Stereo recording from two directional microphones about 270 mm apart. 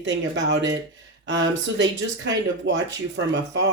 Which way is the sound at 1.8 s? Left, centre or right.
Right.